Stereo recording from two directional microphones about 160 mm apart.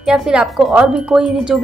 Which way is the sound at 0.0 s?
5° right (ahead or behind).